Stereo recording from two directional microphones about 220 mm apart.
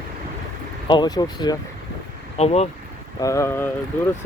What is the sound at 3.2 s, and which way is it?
Speech, 15° left (ahead or behind).